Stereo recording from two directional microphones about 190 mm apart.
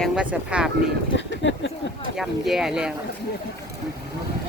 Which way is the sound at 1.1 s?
70° left (ahead or behind).